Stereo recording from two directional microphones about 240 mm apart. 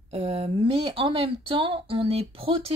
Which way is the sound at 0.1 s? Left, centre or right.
Right.